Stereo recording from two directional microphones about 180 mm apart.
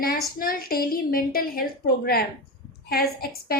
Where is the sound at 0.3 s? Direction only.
55° left (ahead or behind).